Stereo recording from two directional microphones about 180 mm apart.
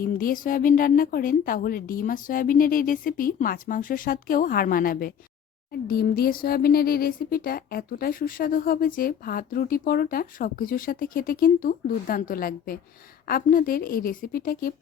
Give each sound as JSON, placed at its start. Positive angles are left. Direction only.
{"t": 0.0, "sound": "speech", "side_deg": 50}